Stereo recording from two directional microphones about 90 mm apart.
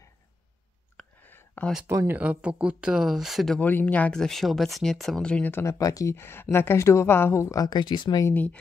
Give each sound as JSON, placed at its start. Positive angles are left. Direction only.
{"t": 1.2, "sound": "a sound", "side_deg": 20}
{"t": 1.9, "sound": "speech", "side_deg": -35}
{"t": 2.1, "sound": "speech", "side_deg": -15}
{"t": 3.5, "sound": "speech", "side_deg": 20}
{"t": 4.2, "sound": "speech", "side_deg": 0}
{"t": 5.5, "sound": "a woman's voice", "side_deg": 30}
{"t": 5.8, "sound": "speech", "side_deg": 40}
{"t": 6.1, "sound": "a woman's voice", "side_deg": 25}
{"t": 7.5, "sound": "speech", "side_deg": 50}
{"t": 7.8, "sound": "speech", "side_deg": 60}
{"t": 8.3, "sound": "a woman's voice", "side_deg": 20}